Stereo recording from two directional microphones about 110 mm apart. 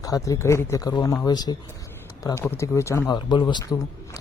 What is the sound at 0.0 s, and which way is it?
Speech, 30° left (ahead or behind).